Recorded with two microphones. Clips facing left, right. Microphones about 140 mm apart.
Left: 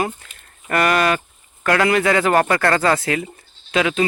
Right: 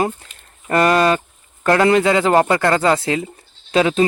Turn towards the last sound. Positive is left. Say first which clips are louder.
# right 4 dB
turn(degrees=-30)  # may be behind; listen again after turning